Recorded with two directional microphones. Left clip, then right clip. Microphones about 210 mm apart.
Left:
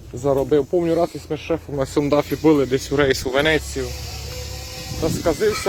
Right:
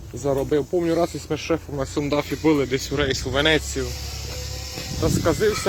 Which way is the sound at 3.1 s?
50° left (ahead or behind).